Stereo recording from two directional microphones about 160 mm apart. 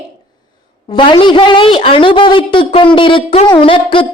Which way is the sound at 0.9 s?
30° left (ahead or behind).